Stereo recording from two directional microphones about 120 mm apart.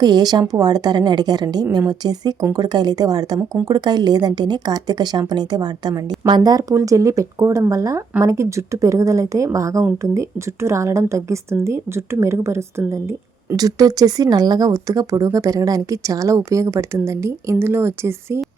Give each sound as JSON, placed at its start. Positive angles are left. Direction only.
{"t": 0.0, "sound": "a woman's voice", "side_deg": -35}